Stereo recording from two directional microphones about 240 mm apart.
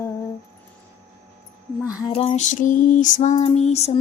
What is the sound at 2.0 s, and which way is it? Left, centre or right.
Female singing, left.